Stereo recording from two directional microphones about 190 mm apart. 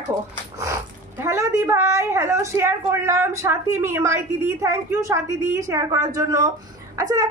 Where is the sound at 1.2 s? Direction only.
15° right (ahead or behind).